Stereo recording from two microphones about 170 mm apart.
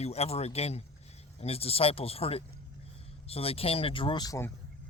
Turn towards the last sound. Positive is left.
turn(degrees=20)  # may be behind; listen again after turning